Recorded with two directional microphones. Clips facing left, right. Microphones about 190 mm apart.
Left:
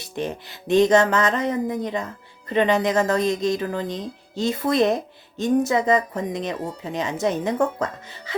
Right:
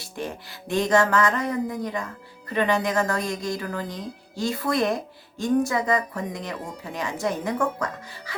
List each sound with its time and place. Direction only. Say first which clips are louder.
0.0 s speech: left 4 dB; 20° left (ahead or behind)